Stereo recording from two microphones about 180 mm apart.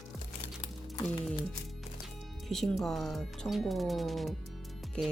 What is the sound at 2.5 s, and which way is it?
Speech, centre (ahead or behind).